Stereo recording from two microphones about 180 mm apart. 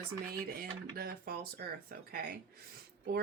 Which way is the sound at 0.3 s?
55° right (ahead or behind).